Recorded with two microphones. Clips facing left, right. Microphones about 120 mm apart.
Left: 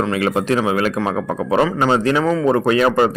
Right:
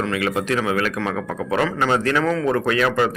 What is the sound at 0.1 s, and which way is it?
A man's voice, 35° left (ahead or behind).